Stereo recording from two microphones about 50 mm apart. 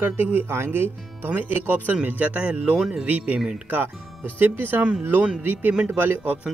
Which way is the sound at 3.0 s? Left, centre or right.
Right.